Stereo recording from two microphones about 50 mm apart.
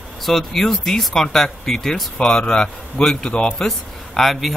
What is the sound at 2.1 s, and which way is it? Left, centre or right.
A man's voice, centre.